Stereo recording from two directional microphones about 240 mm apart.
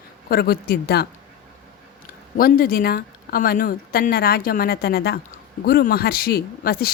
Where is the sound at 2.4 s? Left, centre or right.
Left.